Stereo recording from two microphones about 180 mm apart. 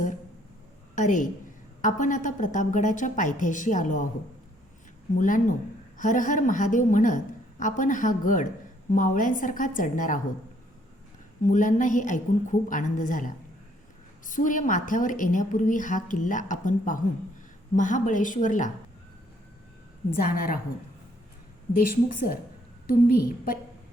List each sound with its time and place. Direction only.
0.9 s a woman's voice: 45° left (ahead or behind)
5.1 s a woman's voice: 45° left (ahead or behind)
11.4 s a woman's voice: 45° left (ahead or behind)
20.3 s a woman's voice: 50° left (ahead or behind)
21.8 s a woman's voice: 50° left (ahead or behind)